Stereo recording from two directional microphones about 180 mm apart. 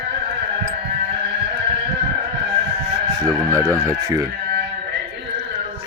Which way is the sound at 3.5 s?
15° right (ahead or behind).